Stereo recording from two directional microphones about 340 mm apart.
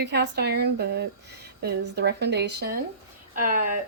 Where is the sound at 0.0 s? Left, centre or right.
Right.